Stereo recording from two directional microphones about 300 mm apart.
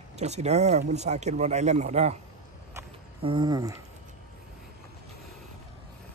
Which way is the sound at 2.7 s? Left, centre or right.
Centre.